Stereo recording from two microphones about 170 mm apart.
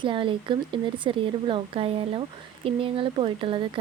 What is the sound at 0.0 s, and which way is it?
Speech, 30° right (ahead or behind).